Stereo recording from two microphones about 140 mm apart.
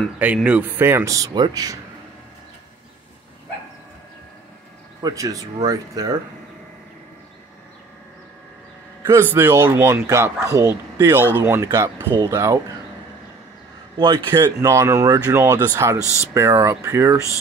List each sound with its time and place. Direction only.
0.2 s speech: 10° right (ahead or behind); by 1.8 s 25° right (ahead or behind)
5.0 s speech: 25° right (ahead or behind)
9.0 s speech: 15° right (ahead or behind)
13.9 s a man's voice: 30° right (ahead or behind)
14.4 s speech: 20° right (ahead or behind)